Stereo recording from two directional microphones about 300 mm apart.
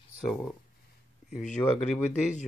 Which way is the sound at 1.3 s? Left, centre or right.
Left.